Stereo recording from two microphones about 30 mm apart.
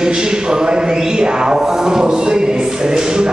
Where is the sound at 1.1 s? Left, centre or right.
Right.